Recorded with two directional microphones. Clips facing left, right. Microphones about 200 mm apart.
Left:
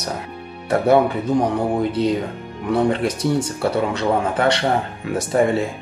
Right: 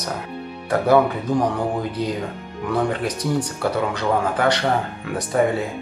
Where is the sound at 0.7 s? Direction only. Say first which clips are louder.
Left 1 dB; 25° left (ahead or behind).